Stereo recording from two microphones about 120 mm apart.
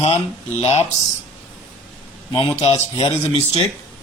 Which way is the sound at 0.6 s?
55° left (ahead or behind).